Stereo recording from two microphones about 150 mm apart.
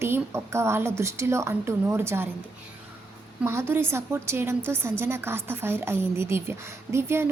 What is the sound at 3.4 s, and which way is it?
A woman's voice, 15° right (ahead or behind).